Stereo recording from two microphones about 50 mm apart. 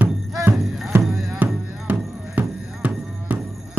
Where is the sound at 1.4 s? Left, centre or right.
Right.